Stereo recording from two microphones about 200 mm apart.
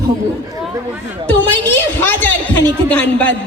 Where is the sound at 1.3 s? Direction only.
10° left (ahead or behind).